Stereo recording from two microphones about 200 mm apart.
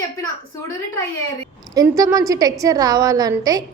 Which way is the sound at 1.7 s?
15° right (ahead or behind).